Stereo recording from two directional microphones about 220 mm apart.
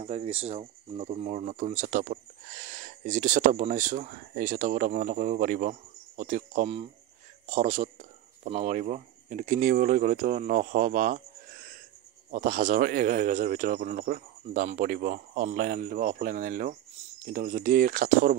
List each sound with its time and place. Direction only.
0.0 s speech: 30° right (ahead or behind)